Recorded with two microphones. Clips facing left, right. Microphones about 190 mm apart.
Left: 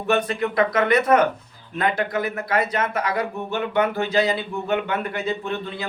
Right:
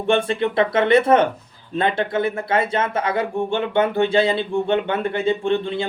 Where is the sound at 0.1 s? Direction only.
25° right (ahead or behind).